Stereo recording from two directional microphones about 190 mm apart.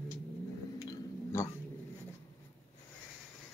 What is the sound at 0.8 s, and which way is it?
Chewing, 15° left (ahead or behind).